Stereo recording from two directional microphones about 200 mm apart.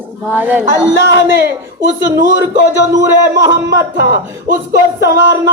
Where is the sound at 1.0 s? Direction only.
60° right (ahead or behind).